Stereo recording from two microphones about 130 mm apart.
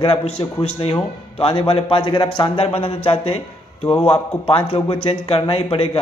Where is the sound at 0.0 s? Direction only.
45° left (ahead or behind).